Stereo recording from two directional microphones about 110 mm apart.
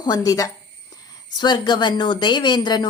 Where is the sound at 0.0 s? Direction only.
35° left (ahead or behind).